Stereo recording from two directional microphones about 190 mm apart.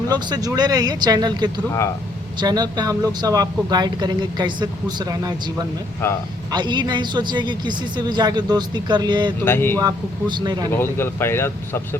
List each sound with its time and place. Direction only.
0.1 s speech: 20° right (ahead or behind)
6.0 s speech: 10° left (ahead or behind)
6.5 s speech: 25° right (ahead or behind)
9.4 s speech: 10° left (ahead or behind)
9.7 s speech: 20° right (ahead or behind)
10.7 s speech: 10° left (ahead or behind)